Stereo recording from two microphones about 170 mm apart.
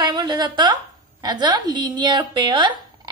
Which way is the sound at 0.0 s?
25° right (ahead or behind).